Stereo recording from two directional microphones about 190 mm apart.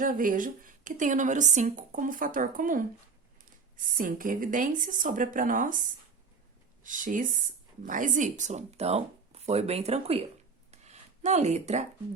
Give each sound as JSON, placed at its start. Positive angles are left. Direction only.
{"t": 0.0, "sound": "a woman's voice", "side_deg": -45}
{"t": 6.8, "sound": "a woman's voice", "side_deg": -45}
{"t": 10.7, "sound": "a sound", "side_deg": -35}